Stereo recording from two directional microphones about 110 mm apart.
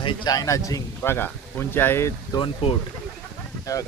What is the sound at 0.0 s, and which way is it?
Speech, 50° left (ahead or behind).